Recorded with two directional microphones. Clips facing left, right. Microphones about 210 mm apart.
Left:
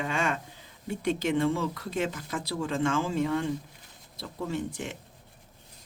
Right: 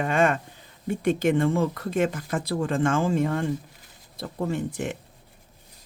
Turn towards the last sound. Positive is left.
turn(degrees=-55)  # may be behind; listen again after turning